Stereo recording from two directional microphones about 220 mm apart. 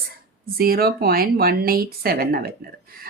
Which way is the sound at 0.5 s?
45° right (ahead or behind).